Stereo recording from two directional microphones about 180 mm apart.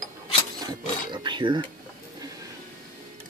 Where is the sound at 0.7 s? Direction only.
25° right (ahead or behind).